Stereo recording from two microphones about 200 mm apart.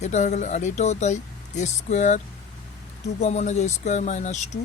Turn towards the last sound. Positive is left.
turn(degrees=35)  # may be behind; listen again after turning